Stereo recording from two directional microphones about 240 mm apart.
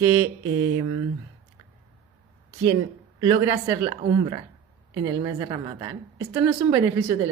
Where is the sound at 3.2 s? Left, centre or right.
Centre.